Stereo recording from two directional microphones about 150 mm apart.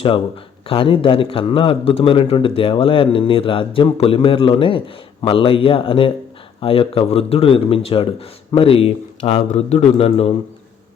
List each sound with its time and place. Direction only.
0.7 s a man's voice: 35° left (ahead or behind)